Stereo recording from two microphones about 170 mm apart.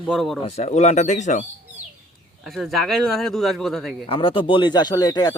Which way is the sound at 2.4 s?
Centre (ahead or behind).